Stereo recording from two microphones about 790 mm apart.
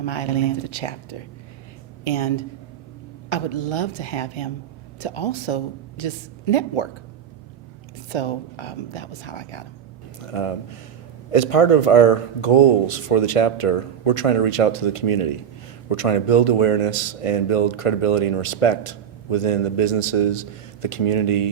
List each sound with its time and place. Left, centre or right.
0.0 s speech: left
2.0 s speech: left
8.1 s speech: left